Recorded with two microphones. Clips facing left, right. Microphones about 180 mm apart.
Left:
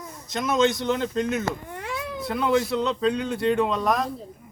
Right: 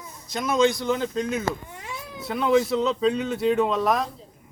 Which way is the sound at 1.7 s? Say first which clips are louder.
Left 5 dB; 65° left (ahead or behind).